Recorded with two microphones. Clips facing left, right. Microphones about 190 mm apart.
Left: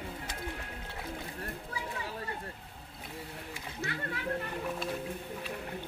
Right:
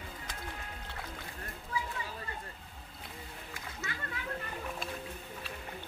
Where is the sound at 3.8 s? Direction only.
55° left (ahead or behind).